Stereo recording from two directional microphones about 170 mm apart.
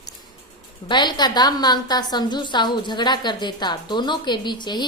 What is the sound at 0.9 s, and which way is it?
A woman's voice, 25° left (ahead or behind).